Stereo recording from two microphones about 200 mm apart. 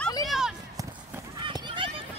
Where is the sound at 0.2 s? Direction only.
Centre (ahead or behind).